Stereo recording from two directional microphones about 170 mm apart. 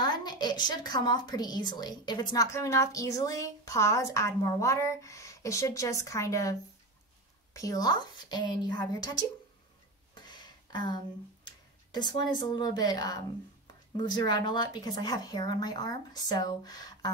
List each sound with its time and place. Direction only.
0.0 s a woman's voice: 25° left (ahead or behind)
7.5 s a woman's voice: 20° left (ahead or behind)
10.1 s a sound: 25° left (ahead or behind)
11.4 s a woman's voice: 25° left (ahead or behind)